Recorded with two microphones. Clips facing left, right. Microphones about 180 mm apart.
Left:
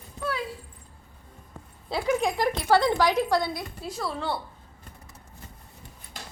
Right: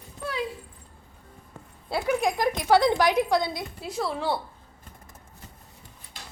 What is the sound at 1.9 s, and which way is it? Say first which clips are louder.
Speech: even; 5° right (ahead or behind).